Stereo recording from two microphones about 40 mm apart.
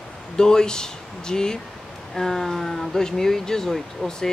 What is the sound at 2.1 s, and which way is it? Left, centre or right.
Speech, centre.